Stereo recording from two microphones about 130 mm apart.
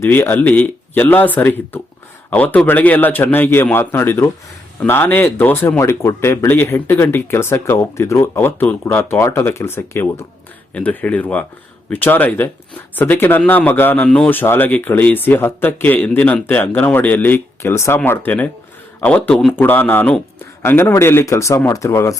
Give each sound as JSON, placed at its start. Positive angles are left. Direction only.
{"t": 0.0, "sound": "speech", "side_deg": 15}